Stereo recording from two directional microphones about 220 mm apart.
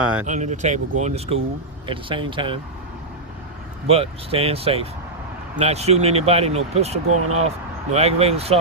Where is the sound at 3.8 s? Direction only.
25° right (ahead or behind).